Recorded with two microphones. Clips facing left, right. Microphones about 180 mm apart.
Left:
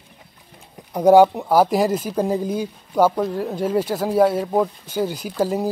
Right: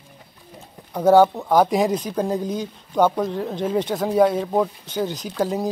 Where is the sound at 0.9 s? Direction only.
10° left (ahead or behind).